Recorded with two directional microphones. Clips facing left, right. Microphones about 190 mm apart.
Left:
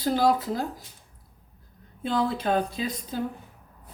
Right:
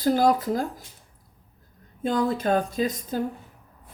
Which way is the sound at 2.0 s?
45° right (ahead or behind).